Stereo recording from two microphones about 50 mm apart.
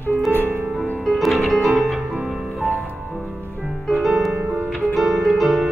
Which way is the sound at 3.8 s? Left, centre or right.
Centre.